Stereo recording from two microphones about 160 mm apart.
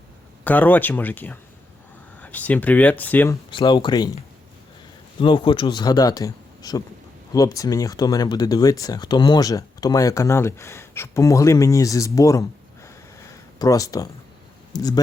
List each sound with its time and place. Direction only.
0.4 s speech: 10° left (ahead or behind)
3.5 s speech: 30° left (ahead or behind)
5.2 s speech: 30° left (ahead or behind)